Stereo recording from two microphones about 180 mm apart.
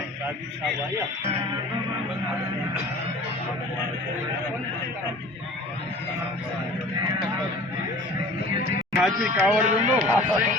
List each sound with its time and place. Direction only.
9.0 s speech: 5° right (ahead or behind)
9.6 s speech: 45° right (ahead or behind)
10.1 s speech: 15° right (ahead or behind)